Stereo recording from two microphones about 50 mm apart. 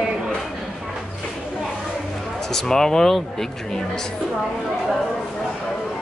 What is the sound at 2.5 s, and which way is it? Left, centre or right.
Speech, centre.